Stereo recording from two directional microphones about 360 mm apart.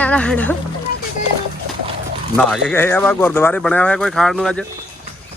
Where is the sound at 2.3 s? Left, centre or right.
Centre.